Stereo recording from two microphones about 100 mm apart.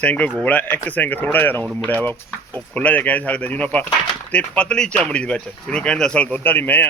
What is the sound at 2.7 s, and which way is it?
Speech, 15° left (ahead or behind).